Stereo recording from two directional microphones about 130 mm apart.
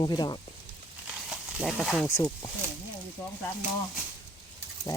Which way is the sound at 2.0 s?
20° left (ahead or behind).